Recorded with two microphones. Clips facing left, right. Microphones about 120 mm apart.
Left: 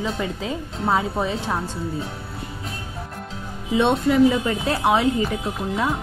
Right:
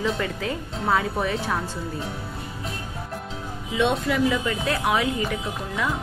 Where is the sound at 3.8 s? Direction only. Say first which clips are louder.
Left 5 dB; 30° left (ahead or behind).